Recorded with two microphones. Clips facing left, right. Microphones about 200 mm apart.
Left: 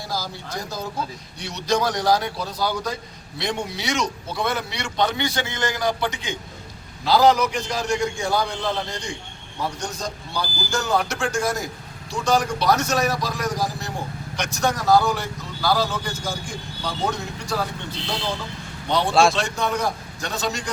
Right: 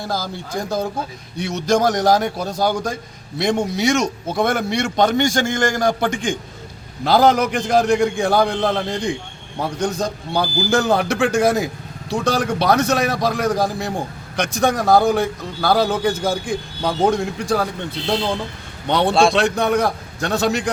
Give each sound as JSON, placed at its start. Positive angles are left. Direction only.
{"t": 0.0, "sound": "a man's voice", "side_deg": -55}
{"t": 18.9, "sound": "a man's voice", "side_deg": -65}